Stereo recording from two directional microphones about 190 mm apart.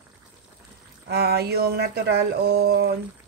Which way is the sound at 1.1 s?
55° right (ahead or behind).